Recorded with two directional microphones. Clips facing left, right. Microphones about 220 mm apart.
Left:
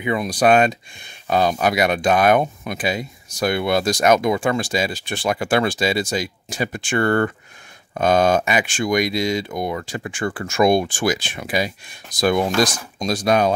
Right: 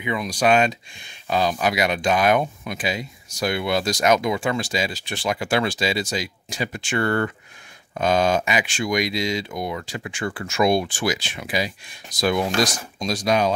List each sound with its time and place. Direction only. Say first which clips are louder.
0.0 s speech: left 4 dB; 45° left (ahead or behind)